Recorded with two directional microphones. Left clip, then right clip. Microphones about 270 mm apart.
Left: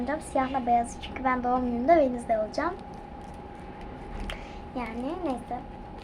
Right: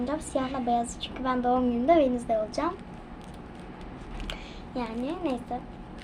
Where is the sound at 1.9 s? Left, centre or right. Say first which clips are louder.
Left 2 dB; centre.